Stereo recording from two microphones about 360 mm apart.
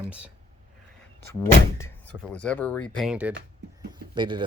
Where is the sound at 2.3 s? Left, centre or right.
Centre.